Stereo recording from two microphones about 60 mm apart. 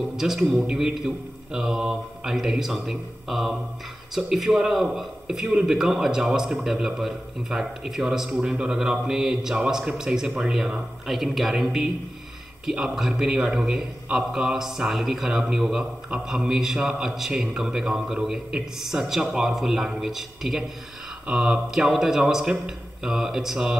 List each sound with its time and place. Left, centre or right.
0.0 s a man's voice: centre